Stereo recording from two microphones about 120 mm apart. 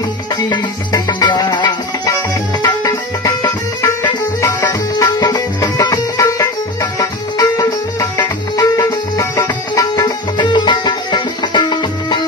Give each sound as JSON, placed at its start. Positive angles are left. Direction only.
{"t": 0.9, "sound": "music", "side_deg": 35}